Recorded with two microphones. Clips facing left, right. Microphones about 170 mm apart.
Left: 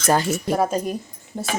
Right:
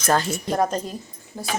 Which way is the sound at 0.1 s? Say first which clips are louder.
Left 2 dB; 10° left (ahead or behind).